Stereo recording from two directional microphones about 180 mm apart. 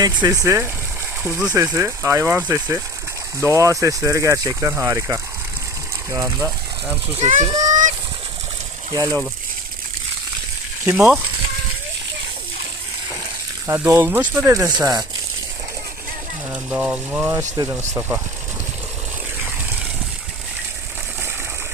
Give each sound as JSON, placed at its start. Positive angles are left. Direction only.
{"t": 0.0, "sound": "speech", "side_deg": -20}
{"t": 7.2, "sound": "speech", "side_deg": -40}
{"t": 7.7, "sound": "fowl", "side_deg": -45}
{"t": 8.9, "sound": "speech", "side_deg": -20}
{"t": 10.8, "sound": "speech", "side_deg": -5}
{"t": 13.7, "sound": "speech", "side_deg": -15}
{"t": 16.5, "sound": "speech", "side_deg": -10}